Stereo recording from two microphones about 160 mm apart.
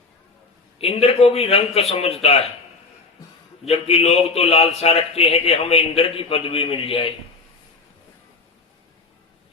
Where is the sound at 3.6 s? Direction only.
40° left (ahead or behind).